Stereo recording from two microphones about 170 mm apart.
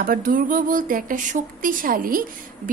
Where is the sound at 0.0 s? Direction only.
55° right (ahead or behind).